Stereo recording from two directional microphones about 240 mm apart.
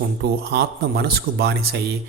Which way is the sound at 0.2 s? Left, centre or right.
Right.